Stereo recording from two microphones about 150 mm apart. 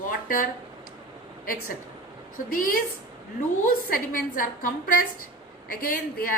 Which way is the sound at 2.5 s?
65° left (ahead or behind).